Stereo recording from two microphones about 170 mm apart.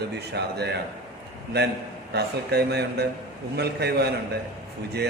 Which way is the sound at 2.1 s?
75° right (ahead or behind).